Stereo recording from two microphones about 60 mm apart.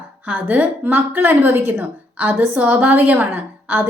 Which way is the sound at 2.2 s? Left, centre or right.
Right.